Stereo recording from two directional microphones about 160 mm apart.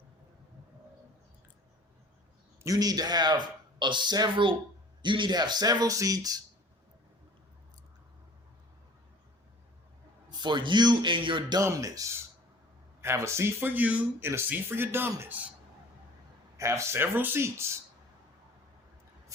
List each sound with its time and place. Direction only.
2.6 s a man's voice: 25° right (ahead or behind)
10.2 s a man's voice: 30° right (ahead or behind); by 15.4 s 15° right (ahead or behind)
16.6 s speech: 20° right (ahead or behind)